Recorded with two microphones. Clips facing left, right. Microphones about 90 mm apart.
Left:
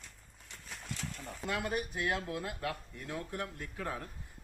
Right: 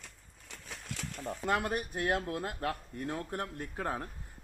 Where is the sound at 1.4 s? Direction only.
45° right (ahead or behind).